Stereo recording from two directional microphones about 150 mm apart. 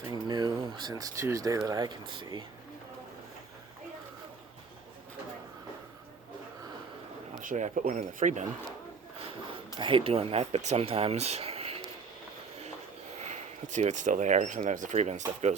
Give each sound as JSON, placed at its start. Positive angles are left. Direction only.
{"t": 0.1, "sound": "speech", "side_deg": -30}
{"t": 7.4, "sound": "speech", "side_deg": -55}
{"t": 9.7, "sound": "speech", "side_deg": -35}
{"t": 13.2, "sound": "speech", "side_deg": -55}